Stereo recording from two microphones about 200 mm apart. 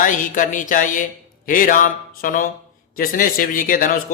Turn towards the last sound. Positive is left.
turn(degrees=45)  # may be behind; listen again after turning